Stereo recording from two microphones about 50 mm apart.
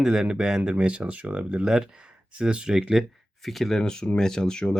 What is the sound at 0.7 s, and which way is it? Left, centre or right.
Speech, right.